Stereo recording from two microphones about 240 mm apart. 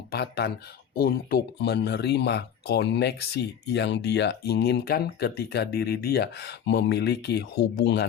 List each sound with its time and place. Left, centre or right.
0.1 s speech: left